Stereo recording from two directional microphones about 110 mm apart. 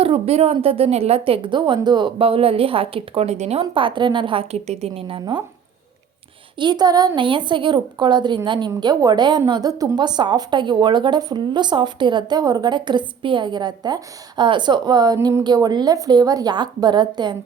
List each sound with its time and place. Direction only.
0.0 s a woman's voice: 65° right (ahead or behind); by 3.6 s 80° right
3.6 s a woman's voice: 50° right (ahead or behind)
4.5 s a woman's voice: 80° right; by 5.2 s 55° right (ahead or behind)
6.6 s a woman's voice: 40° right (ahead or behind)
7.2 s a woman's voice: 45° right (ahead or behind)